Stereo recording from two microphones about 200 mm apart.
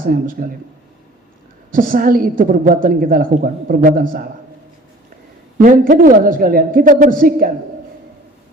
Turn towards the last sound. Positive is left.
turn(degrees=-45)  # may be behind; listen again after turning